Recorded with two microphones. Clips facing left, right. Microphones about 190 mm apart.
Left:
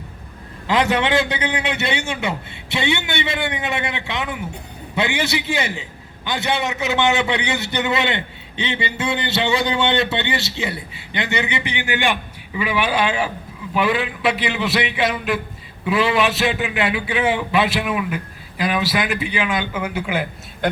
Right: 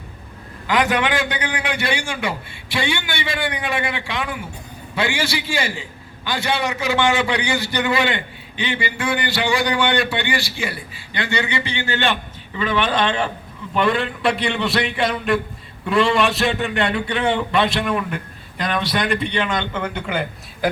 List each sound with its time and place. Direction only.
0.7 s a man's voice: 25° left (ahead or behind); by 20.7 s 5° left (ahead or behind)